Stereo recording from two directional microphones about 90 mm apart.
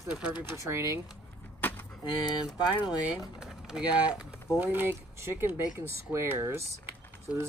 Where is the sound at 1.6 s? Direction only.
20° left (ahead or behind).